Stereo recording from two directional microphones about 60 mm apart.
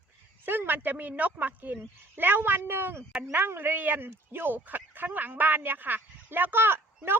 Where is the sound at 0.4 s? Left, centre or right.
Right.